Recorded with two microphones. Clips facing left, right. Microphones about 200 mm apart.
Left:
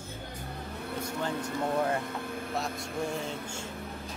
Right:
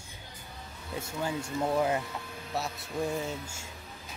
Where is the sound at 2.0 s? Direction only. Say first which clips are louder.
Left 5 dB; 55° left (ahead or behind).